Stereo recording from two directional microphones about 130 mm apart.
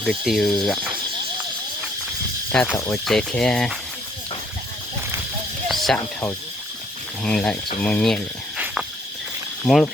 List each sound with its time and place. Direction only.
0.0 s speech: centre (ahead or behind)
2.7 s speech: 20° left (ahead or behind)
3.0 s speech: 5° left (ahead or behind)
5.6 s a sound: centre (ahead or behind)
7.2 s speech: 5° left (ahead or behind)
8.5 s a sound: 5° right (ahead or behind)
9.7 s speech: 5° right (ahead or behind)